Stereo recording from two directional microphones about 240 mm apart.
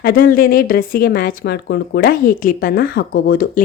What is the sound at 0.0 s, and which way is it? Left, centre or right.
Speech, left.